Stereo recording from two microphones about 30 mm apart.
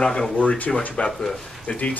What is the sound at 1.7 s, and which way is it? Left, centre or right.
Speech, left.